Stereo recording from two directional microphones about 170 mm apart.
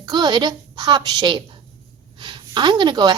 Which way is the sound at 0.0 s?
25° right (ahead or behind).